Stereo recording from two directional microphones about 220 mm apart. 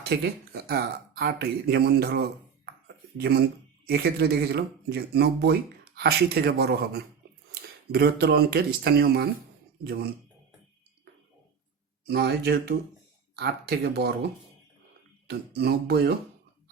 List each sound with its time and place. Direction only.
0.0 s speech: 45° right (ahead or behind)
2.8 s a sound: 45° right (ahead or behind)
3.8 s speech: 45° right (ahead or behind)
12.0 s speech: 50° right (ahead or behind)
15.3 s speech: 45° right (ahead or behind)